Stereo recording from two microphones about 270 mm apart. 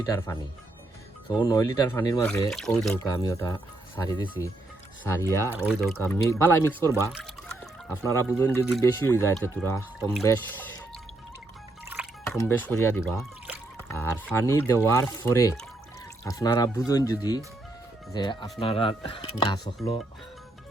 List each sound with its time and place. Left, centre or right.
0.0 s speech: centre
5.5 s speech: centre
6.0 s speech: centre
6.8 s speech: centre
7.4 s speech: centre
11.9 s music: centre
12.4 s speech: centre